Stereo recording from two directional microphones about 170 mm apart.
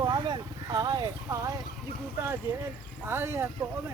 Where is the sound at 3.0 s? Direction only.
15° right (ahead or behind).